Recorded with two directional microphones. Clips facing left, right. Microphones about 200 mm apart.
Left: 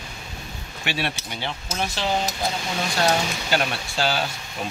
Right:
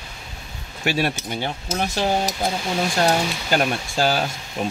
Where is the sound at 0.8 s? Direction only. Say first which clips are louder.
Right 6 dB; 40° right (ahead or behind).